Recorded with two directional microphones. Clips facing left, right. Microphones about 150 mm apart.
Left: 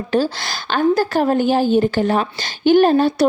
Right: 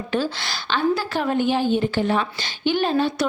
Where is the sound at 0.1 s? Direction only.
40° left (ahead or behind).